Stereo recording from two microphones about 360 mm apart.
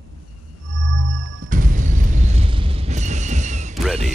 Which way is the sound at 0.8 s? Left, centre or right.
Right.